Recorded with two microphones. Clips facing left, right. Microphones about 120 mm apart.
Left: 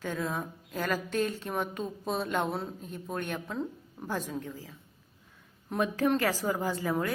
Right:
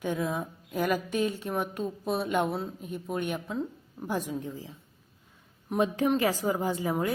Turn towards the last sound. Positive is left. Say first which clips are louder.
# right 2 dB
turn(degrees=-20)  # may be behind; listen again after turning